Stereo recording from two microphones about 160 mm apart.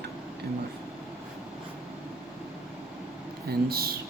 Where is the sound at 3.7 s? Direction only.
70° right (ahead or behind).